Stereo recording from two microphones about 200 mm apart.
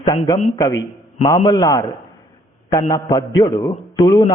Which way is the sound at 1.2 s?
20° left (ahead or behind).